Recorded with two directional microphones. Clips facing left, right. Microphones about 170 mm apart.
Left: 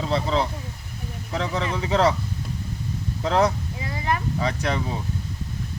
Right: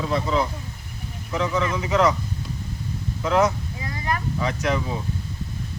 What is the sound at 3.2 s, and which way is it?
Speech, 35° left (ahead or behind).